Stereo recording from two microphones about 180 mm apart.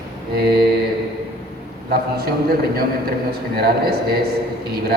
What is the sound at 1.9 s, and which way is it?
A man's voice, 60° right (ahead or behind).